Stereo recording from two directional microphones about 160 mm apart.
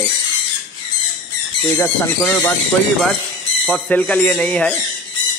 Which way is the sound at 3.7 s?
5° left (ahead or behind).